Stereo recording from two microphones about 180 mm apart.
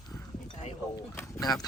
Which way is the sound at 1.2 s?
20° left (ahead or behind).